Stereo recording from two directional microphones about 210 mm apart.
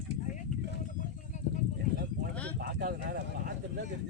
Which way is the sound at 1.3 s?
35° left (ahead or behind).